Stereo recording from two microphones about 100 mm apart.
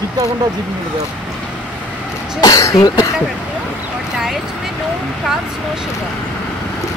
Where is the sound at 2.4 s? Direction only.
35° left (ahead or behind).